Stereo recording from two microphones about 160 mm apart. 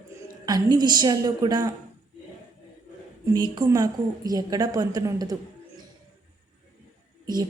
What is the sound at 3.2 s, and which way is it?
Speech, 25° right (ahead or behind).